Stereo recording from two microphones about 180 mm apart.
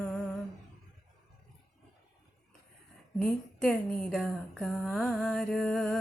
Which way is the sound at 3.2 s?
5° left (ahead or behind).